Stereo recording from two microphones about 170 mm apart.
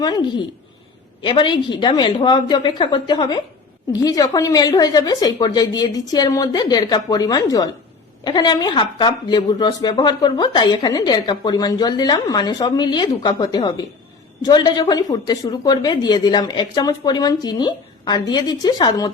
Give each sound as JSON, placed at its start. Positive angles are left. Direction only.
{"t": 1.2, "sound": "speech", "side_deg": 25}